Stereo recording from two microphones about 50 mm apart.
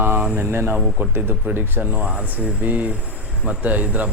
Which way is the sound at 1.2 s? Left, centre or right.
Right.